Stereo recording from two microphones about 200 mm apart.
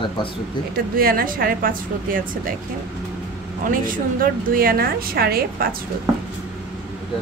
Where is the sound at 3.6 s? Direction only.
45° right (ahead or behind).